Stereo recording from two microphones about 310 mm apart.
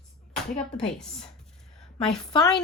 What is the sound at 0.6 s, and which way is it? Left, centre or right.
Speech, centre.